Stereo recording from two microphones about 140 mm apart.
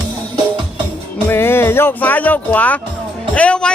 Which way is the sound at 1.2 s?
15° left (ahead or behind).